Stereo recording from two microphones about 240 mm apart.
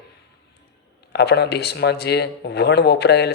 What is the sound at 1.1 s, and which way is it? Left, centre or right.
Speech, left.